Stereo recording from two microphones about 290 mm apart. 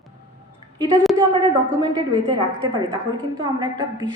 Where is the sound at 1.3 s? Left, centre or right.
Centre.